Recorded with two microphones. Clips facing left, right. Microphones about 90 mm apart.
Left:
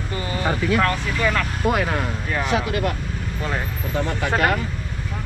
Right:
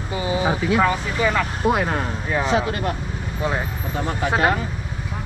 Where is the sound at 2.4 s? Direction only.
20° right (ahead or behind).